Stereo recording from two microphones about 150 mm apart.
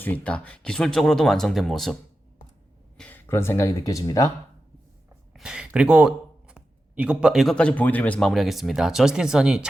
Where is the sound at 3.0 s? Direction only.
15° left (ahead or behind).